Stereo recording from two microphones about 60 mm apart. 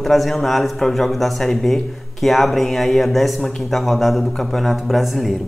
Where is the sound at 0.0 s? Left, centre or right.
Centre.